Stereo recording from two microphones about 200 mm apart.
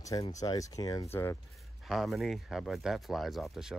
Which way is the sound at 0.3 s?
15° left (ahead or behind).